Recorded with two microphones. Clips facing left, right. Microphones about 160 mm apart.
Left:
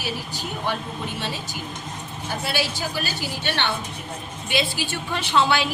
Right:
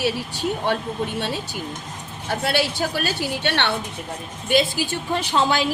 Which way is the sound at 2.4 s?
60° right (ahead or behind).